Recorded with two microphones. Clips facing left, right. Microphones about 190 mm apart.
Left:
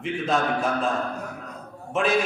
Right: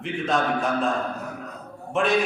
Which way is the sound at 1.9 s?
Centre (ahead or behind).